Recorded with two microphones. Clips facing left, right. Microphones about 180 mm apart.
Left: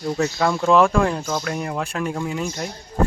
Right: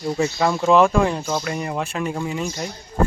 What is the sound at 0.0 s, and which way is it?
Speech, 5° right (ahead or behind).